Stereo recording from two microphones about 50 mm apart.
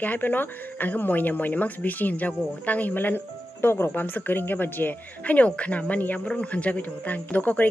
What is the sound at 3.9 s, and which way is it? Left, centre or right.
Speech, left.